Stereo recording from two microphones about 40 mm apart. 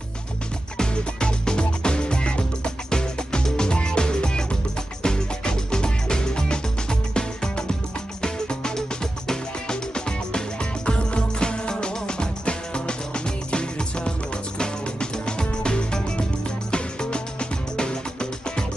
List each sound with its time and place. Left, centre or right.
0.7 s music: centre